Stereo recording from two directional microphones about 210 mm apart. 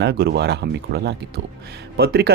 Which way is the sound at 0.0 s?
50° right (ahead or behind).